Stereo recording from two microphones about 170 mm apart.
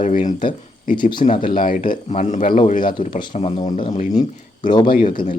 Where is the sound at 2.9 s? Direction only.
30° left (ahead or behind).